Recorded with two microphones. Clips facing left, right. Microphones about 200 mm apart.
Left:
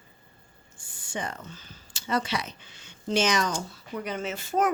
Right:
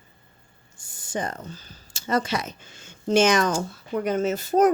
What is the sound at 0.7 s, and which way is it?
Speech, 40° right (ahead or behind).